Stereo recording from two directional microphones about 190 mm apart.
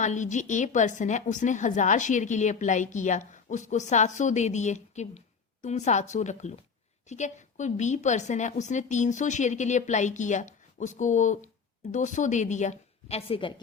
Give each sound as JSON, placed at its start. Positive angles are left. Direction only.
{"t": 0.0, "sound": "a woman's voice", "side_deg": 40}